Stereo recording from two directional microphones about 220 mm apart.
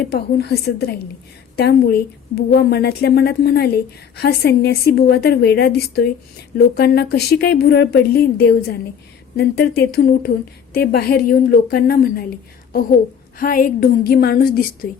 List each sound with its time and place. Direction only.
0.0 s speech: 45° left (ahead or behind)
13.4 s a woman's voice: 40° left (ahead or behind)